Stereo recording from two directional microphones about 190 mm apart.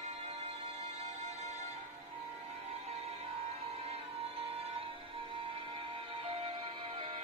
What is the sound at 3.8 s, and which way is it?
Music, 30° right (ahead or behind).